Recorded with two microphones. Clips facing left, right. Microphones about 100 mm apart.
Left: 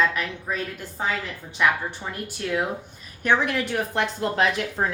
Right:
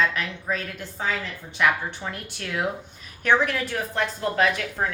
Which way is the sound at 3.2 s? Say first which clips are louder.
Even; 20° left (ahead or behind).